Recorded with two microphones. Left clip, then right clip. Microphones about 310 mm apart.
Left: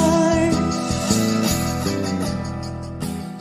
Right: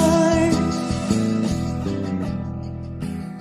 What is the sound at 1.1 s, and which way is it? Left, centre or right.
Music, centre.